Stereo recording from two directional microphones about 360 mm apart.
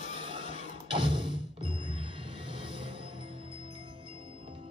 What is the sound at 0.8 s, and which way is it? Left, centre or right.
Music, centre.